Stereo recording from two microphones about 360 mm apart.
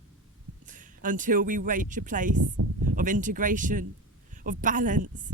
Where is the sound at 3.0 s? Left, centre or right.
Right.